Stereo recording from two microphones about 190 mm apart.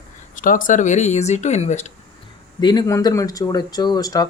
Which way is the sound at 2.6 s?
20° left (ahead or behind).